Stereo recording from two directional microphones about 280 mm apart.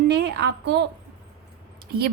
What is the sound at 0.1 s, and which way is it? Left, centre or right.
Speech, right.